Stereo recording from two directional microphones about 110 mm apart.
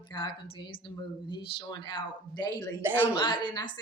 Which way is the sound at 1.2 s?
45° left (ahead or behind).